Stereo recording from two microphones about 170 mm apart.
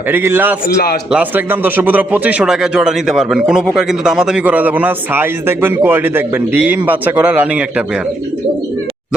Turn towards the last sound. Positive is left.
turn(degrees=-10)  # may be behind; listen again after turning